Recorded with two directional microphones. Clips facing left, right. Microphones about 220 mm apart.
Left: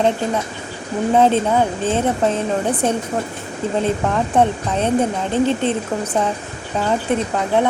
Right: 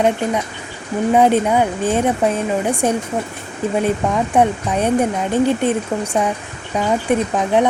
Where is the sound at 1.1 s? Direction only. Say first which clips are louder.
Right 1 dB; 15° right (ahead or behind).